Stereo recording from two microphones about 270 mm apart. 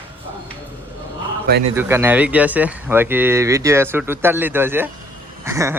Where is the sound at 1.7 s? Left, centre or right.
Centre.